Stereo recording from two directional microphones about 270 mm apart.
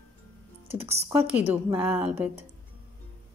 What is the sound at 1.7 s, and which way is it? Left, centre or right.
Music, centre.